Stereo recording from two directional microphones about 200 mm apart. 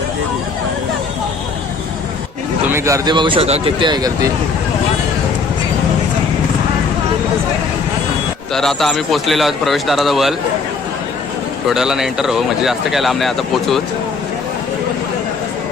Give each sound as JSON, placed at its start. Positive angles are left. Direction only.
{"t": 2.6, "sound": "speech", "side_deg": -15}
{"t": 8.5, "sound": "speech", "side_deg": 0}
{"t": 11.7, "sound": "speech", "side_deg": 0}